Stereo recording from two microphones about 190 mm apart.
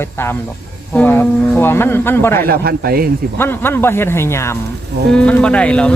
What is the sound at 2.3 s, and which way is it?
Speech, 50° right (ahead or behind).